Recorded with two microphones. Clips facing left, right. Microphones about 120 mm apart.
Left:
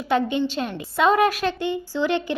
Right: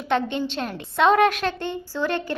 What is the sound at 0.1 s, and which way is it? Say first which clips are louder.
A woman's voice: left 2 dB; 5° left (ahead or behind).